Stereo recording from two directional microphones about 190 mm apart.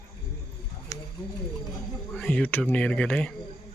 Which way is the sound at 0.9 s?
15° left (ahead or behind).